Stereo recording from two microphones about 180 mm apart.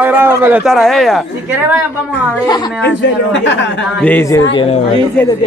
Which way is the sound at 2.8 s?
75° left (ahead or behind).